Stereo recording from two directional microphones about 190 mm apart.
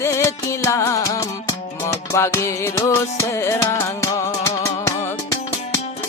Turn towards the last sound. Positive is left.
turn(degrees=15)  # may be behind; listen again after turning